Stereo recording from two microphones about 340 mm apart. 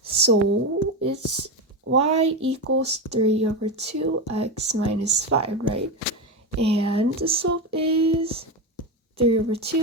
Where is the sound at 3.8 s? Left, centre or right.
Right.